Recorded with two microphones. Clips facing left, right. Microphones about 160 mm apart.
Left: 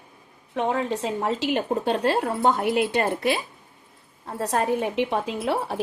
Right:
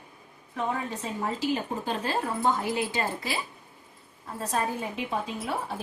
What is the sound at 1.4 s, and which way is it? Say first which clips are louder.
A woman's voice: left 5 dB; 75° left (ahead or behind).